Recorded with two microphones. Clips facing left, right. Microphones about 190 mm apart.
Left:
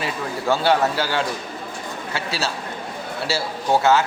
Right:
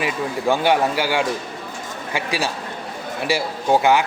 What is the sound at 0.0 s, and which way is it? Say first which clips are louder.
A man's voice: right 3 dB; 15° right (ahead or behind).